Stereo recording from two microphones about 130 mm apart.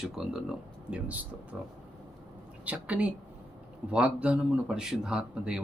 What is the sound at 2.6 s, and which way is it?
Speech, 10° right (ahead or behind).